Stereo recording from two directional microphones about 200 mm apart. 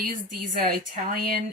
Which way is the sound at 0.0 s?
45° right (ahead or behind).